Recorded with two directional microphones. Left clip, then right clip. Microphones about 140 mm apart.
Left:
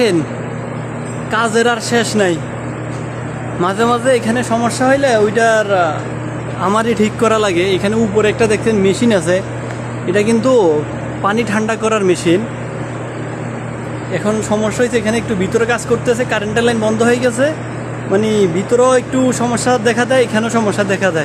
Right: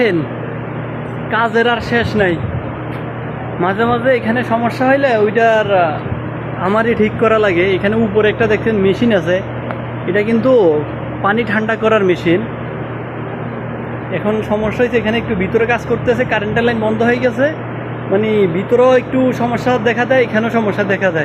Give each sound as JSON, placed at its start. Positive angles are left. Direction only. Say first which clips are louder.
{"t": 1.3, "sound": "speech", "louder": "even", "side_deg": 25}
{"t": 3.6, "sound": "speech", "louder": "even", "side_deg": 35}
{"t": 14.1, "sound": "speech", "louder": "even", "side_deg": 30}